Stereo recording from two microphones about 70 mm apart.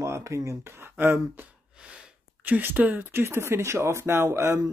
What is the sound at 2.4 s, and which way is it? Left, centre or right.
Speech, right.